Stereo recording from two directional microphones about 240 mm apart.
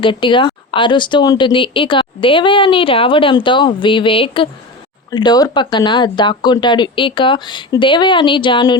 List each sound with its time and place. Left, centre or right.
0.0 s speech: left